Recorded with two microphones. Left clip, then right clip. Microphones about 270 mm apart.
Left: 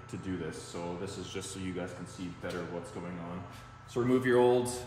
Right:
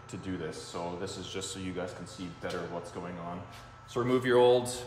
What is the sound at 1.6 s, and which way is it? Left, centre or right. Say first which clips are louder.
Speech: right 2 dB; right.